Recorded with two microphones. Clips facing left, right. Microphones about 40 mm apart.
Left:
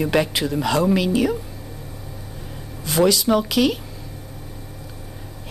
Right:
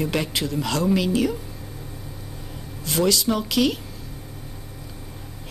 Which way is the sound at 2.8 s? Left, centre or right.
Centre.